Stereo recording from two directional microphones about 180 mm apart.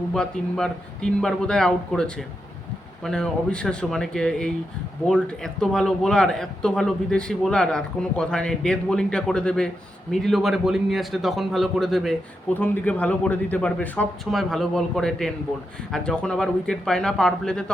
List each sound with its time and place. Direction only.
0.1 s a man's voice: 5° left (ahead or behind)